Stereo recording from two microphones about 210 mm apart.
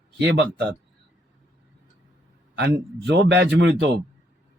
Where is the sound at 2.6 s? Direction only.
55° right (ahead or behind).